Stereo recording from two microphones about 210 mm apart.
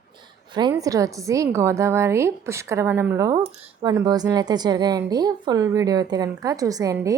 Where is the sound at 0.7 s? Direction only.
15° right (ahead or behind).